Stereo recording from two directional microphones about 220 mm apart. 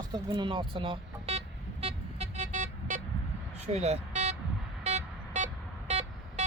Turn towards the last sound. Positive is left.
turn(degrees=-30)  # may be behind; listen again after turning